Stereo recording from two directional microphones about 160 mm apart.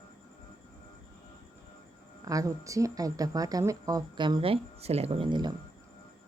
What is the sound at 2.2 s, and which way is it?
A woman's voice, 20° right (ahead or behind).